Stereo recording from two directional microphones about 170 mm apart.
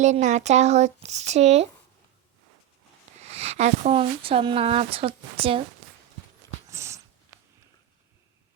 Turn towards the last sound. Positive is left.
turn(degrees=-15)  # may be behind; listen again after turning